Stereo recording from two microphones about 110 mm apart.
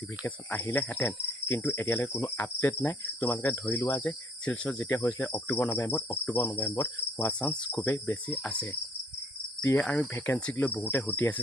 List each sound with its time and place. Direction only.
0.6 s cricket: 20° left (ahead or behind)
4.0 s cricket: 10° left (ahead or behind)
7.8 s speech: 20° left (ahead or behind)
9.8 s speech: 10° left (ahead or behind)